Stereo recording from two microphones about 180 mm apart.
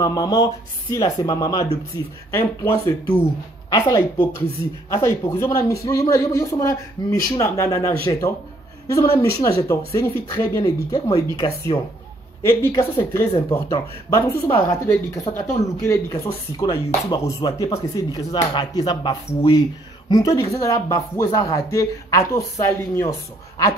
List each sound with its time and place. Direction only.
0.0 s speech: 20° left (ahead or behind)